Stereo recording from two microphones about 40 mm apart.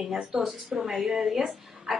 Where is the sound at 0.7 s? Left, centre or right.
Centre.